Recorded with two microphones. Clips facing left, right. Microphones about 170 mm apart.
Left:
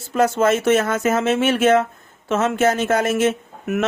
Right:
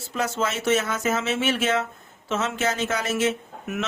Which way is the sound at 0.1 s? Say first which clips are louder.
Left 10 dB; 55° left (ahead or behind).